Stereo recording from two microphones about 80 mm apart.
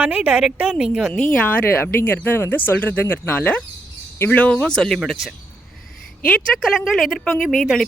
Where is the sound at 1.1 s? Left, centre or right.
Centre.